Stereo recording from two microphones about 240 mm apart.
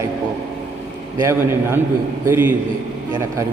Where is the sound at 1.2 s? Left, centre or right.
Centre.